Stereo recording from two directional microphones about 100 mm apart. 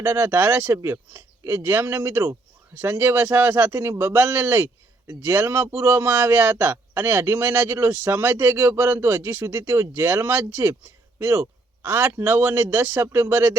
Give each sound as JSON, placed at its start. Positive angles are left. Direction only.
{"t": 0.0, "sound": "a man's voice", "side_deg": -25}